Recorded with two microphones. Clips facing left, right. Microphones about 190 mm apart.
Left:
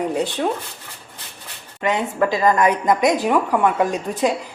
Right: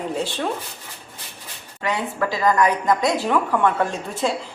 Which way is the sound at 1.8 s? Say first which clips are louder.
Left 4 dB; 20° left (ahead or behind).